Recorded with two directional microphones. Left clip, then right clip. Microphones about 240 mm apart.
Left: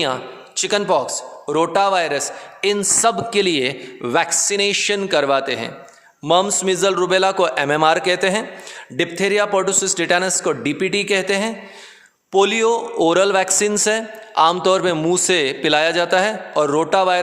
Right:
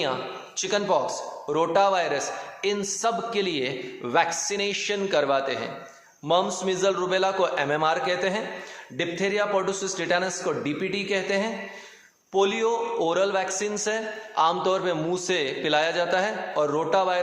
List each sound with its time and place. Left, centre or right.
0.0 s a man's voice: left